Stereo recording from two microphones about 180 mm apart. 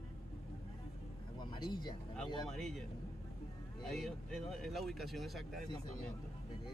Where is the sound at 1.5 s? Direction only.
25° left (ahead or behind).